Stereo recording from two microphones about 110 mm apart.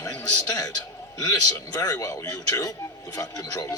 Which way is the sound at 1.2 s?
35° left (ahead or behind).